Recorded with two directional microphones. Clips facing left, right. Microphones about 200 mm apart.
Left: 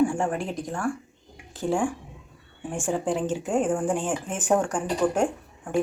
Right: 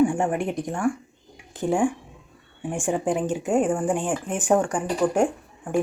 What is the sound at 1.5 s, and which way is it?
Speech, 15° right (ahead or behind).